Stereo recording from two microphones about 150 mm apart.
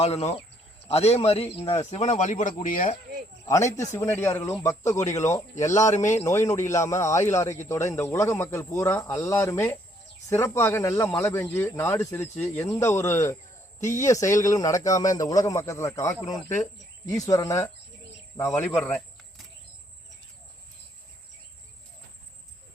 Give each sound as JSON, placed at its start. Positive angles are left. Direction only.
{"t": 0.0, "sound": "a man's voice", "side_deg": 40}
{"t": 3.4, "sound": "speech", "side_deg": 20}
{"t": 5.9, "sound": "a man's voice", "side_deg": 50}
{"t": 6.2, "sound": "speech", "side_deg": 20}